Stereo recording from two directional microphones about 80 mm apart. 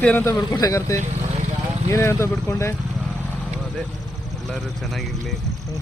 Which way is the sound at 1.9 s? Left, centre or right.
Left.